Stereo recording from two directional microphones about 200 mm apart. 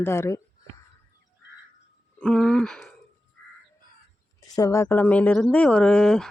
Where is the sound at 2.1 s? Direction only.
5° left (ahead or behind).